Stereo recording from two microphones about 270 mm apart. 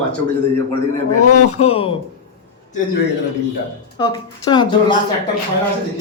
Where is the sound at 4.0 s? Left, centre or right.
Centre.